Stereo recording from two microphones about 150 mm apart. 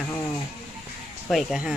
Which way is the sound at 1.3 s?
Centre (ahead or behind).